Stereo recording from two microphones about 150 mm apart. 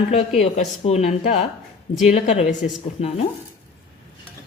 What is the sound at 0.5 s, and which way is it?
Speech, 50° left (ahead or behind).